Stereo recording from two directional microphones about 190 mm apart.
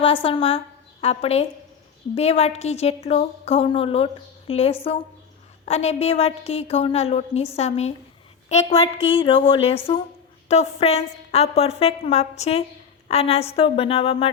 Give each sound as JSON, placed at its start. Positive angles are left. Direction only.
{"t": 0.0, "sound": "a woman's voice", "side_deg": 30}